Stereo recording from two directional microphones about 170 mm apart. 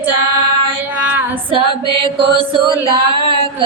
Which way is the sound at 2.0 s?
30° right (ahead or behind).